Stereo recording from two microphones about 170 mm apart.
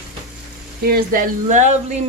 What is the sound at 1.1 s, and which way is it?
Speech, 45° right (ahead or behind).